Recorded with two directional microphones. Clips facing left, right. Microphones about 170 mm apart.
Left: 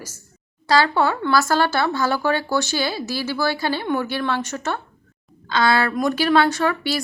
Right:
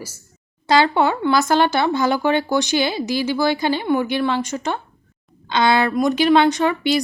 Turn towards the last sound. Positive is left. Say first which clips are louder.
# right 4 dB
turn(degrees=-20)  # may be behind; listen again after turning